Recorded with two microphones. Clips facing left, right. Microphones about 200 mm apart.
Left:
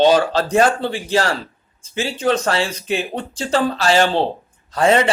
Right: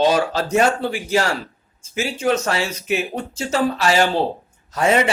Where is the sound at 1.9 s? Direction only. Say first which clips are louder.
Left 1 dB; 30° left (ahead or behind).